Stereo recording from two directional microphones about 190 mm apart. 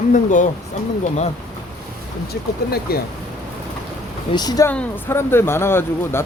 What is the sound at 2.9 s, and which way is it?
Speech, 55° left (ahead or behind).